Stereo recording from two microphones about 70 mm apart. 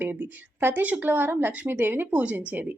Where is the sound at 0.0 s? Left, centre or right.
Right.